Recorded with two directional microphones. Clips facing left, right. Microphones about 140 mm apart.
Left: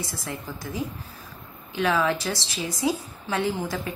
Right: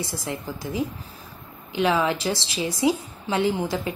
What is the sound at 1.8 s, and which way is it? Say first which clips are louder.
A woman's voice: right 2 dB; 15° right (ahead or behind).